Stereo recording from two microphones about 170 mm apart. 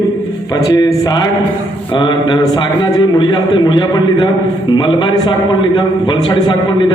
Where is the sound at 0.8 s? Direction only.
25° left (ahead or behind).